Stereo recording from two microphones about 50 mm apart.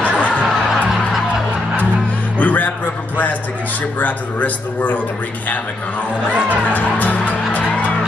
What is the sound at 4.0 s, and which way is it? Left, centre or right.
A man's voice, left.